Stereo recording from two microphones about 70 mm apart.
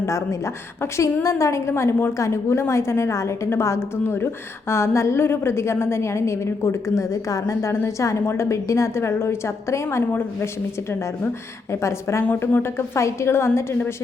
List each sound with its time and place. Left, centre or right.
0.0 s a woman's voice: left
11.7 s a woman's voice: left
12.4 s a woman's voice: left
12.7 s a woman's voice: left